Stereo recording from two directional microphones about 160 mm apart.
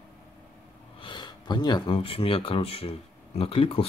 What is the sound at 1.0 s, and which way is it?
Speech, 30° left (ahead or behind).